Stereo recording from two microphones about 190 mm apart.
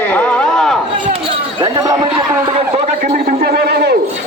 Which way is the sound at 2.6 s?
35° right (ahead or behind).